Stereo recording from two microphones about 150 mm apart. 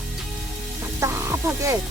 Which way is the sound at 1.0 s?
20° right (ahead or behind).